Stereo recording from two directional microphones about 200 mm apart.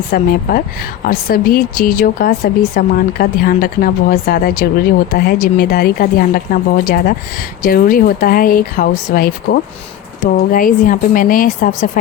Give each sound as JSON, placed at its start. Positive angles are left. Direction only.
{"t": 0.1, "sound": "speech", "side_deg": 45}